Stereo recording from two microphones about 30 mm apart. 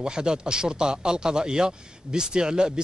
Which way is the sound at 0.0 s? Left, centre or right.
Right.